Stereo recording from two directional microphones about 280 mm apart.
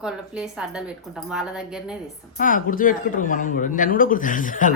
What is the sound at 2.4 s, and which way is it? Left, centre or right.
Speech, left.